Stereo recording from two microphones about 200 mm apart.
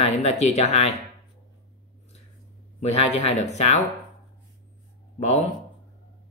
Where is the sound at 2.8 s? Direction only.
30° left (ahead or behind).